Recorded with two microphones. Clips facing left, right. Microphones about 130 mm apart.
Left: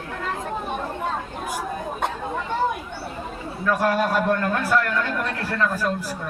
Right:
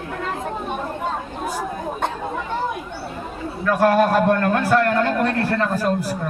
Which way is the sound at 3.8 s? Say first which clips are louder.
Right 7 dB; 50° right (ahead or behind).